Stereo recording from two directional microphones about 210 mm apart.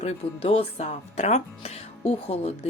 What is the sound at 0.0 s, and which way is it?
Speech, 25° left (ahead or behind).